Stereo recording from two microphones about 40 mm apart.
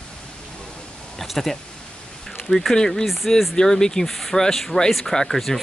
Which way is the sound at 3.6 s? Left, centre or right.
Centre.